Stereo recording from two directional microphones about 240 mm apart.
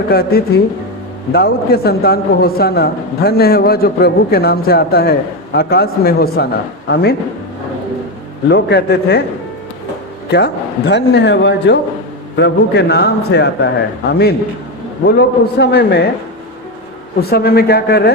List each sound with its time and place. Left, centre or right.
0.1 s a man's voice: left
8.4 s a man's voice: left
10.3 s a man's voice: left
17.2 s a man's voice: left